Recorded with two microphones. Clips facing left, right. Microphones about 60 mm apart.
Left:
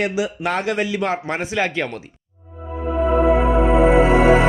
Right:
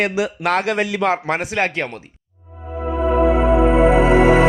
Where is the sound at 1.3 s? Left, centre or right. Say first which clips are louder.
Right 3 dB; right.